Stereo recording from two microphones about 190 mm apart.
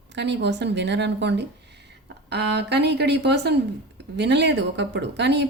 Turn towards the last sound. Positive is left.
turn(degrees=-65)  # may be behind; listen again after turning